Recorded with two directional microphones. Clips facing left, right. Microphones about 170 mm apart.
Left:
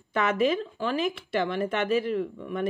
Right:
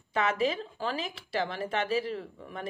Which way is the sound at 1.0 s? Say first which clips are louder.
Left 5 dB; 55° left (ahead or behind).